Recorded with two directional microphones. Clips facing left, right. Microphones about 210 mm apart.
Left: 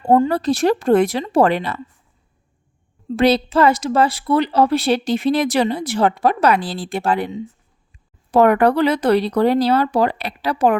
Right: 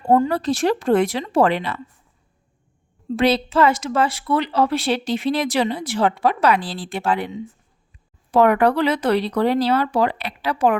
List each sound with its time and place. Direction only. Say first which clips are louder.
0.1 s a woman's voice: left 2 dB; 25° left (ahead or behind)
0.3 s speech: left 3 dB; 40° left (ahead or behind)
3.2 s speech: left 2 dB; 40° left (ahead or behind)
8.3 s speech: left 2 dB; 45° left (ahead or behind)